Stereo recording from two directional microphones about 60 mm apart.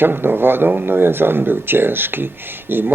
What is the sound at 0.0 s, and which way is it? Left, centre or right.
Speech, right.